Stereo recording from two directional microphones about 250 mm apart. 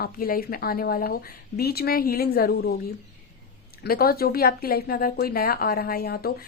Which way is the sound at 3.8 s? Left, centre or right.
Left.